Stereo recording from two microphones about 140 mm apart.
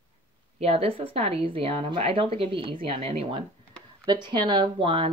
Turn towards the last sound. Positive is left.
turn(degrees=-40)  # may be behind; listen again after turning